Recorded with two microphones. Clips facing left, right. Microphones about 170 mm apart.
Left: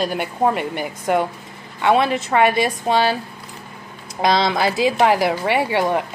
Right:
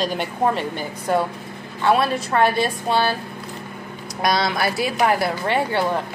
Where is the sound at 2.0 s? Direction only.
20° left (ahead or behind).